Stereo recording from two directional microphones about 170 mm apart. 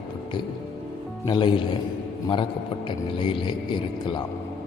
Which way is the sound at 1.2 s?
30° left (ahead or behind).